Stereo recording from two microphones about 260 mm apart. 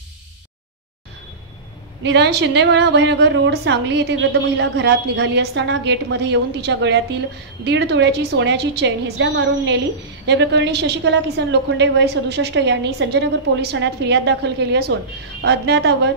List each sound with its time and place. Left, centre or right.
2.0 s a woman's voice: right